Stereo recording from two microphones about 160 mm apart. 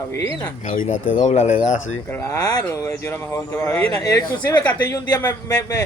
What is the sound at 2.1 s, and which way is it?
Speech, 15° left (ahead or behind).